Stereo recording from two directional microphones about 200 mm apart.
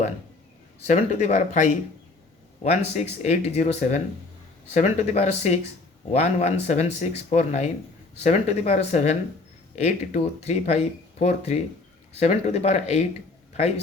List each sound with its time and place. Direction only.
0.9 s speech: 35° left (ahead or behind)